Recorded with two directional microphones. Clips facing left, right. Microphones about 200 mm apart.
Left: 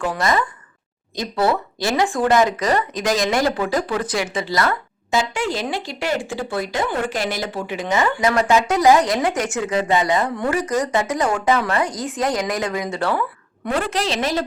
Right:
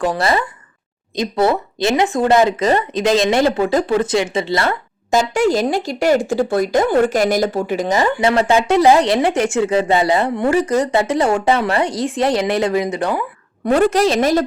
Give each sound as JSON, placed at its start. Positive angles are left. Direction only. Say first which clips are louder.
{"t": 0.0, "sound": "speech", "louder": "right 3 dB", "side_deg": -35}
{"t": 1.1, "sound": "speech", "louder": "right 4 dB", "side_deg": -20}
{"t": 5.1, "sound": "speech", "louder": "right 7 dB", "side_deg": -45}
{"t": 13.7, "sound": "a woman's voice", "louder": "right 8 dB", "side_deg": -45}